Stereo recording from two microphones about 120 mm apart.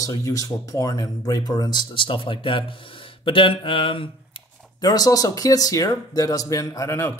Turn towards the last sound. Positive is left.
turn(degrees=25)  # may be behind; listen again after turning